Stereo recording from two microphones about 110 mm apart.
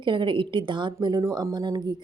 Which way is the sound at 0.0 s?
45° right (ahead or behind).